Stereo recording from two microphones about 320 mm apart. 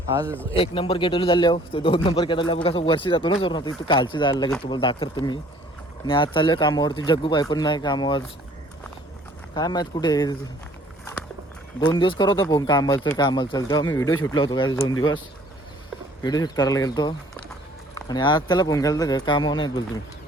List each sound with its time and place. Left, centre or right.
0.5 s speech: centre
9.6 s speech: centre
11.8 s speech: centre
16.2 s speech: centre